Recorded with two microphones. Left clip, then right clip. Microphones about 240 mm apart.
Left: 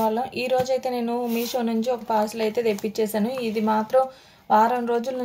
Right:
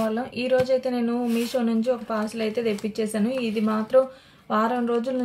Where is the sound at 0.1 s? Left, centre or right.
Left.